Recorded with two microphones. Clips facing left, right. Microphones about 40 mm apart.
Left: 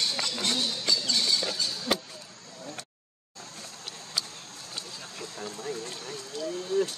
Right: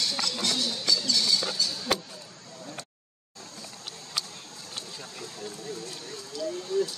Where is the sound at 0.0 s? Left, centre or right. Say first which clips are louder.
Even; left.